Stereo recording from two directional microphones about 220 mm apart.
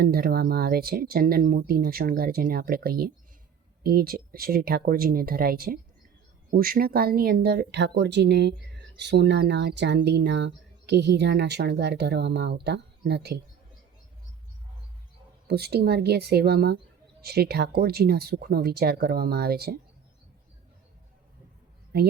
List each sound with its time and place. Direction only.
0.0 s speech: 45° right (ahead or behind)
15.4 s speech: 45° right (ahead or behind)
21.9 s speech: 45° right (ahead or behind)